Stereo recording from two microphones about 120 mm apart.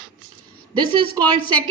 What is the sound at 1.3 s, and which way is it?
Speech, 40° right (ahead or behind).